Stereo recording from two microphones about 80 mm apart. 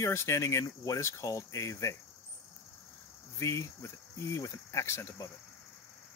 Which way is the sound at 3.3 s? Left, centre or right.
Left.